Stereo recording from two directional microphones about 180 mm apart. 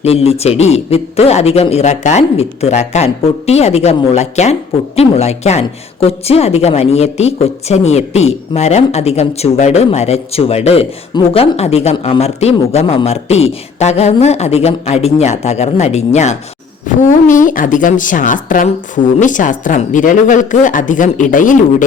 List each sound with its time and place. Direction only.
0.0 s speech: 35° left (ahead or behind)